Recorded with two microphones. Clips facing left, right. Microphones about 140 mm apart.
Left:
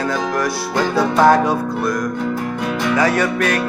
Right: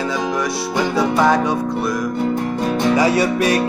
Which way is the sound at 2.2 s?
30° right (ahead or behind).